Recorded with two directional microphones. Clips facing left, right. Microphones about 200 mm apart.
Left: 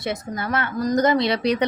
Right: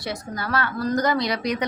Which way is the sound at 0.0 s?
20° left (ahead or behind).